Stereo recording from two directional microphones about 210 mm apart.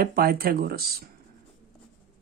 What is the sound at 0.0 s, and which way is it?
Speech, 45° right (ahead or behind).